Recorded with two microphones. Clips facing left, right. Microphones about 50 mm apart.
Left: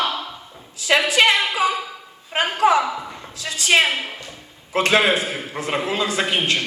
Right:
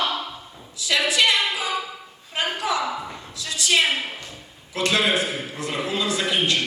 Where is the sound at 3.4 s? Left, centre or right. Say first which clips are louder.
Left 4 dB; left.